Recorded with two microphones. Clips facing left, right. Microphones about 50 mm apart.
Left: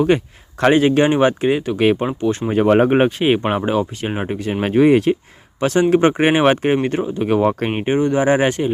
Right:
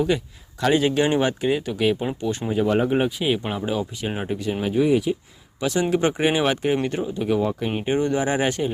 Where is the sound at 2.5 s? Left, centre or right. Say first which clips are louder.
Left 7 dB; left.